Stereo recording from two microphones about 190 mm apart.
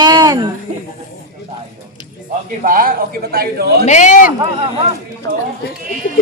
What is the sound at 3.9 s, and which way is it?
Speech, 40° left (ahead or behind).